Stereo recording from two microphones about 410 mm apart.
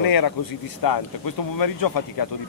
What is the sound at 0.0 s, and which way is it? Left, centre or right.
Speech, left.